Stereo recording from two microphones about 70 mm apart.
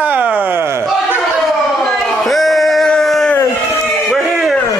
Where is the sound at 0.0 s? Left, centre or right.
Right.